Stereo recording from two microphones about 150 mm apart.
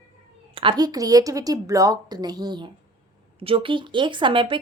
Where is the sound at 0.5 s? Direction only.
35° right (ahead or behind).